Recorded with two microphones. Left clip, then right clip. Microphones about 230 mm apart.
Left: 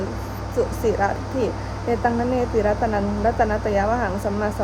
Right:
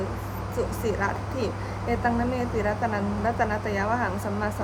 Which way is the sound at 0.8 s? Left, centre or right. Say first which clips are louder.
Left 6 dB; centre.